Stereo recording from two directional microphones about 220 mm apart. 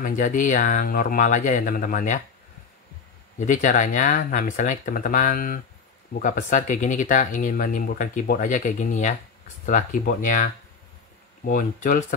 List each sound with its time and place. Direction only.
0.0 s speech: 35° left (ahead or behind)
3.3 s speech: 35° left (ahead or behind)